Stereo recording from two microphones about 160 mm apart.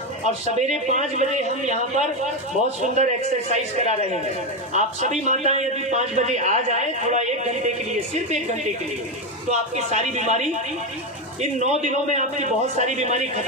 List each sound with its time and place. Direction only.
0.6 s a man's voice: 45° right (ahead or behind)
9.5 s a man's voice: 45° right (ahead or behind)
11.6 s a man's voice: 45° right (ahead or behind)